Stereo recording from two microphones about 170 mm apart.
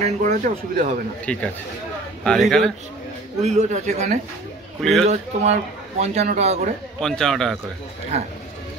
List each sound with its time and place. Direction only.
0.0 s speech: 45° right (ahead or behind)
1.2 s a man's voice: 5° left (ahead or behind)
3.4 s a man's voice: 45° right (ahead or behind)
7.0 s a man's voice: 5° left (ahead or behind)